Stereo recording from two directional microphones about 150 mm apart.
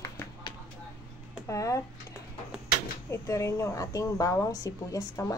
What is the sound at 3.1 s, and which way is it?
A woman's voice, 20° left (ahead or behind).